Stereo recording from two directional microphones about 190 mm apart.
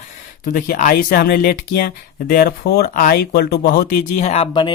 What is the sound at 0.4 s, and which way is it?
Speech, 45° left (ahead or behind).